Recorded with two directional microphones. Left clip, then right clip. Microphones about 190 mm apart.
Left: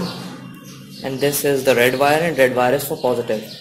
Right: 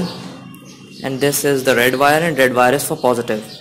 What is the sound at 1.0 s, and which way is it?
Speech, 20° right (ahead or behind).